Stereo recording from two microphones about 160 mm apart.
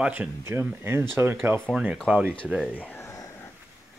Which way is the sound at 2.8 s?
15° left (ahead or behind).